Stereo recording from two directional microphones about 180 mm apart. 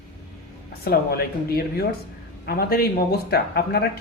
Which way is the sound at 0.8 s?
60° left (ahead or behind).